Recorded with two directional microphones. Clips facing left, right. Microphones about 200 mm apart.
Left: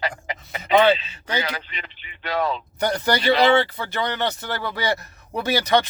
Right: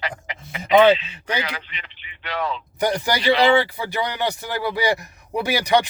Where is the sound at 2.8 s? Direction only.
10° right (ahead or behind).